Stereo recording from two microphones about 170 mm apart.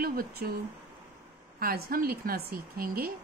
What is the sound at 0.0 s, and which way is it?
Speech, 60° right (ahead or behind).